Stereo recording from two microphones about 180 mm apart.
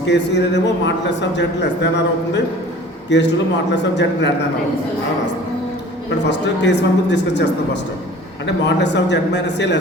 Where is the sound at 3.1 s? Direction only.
80° left.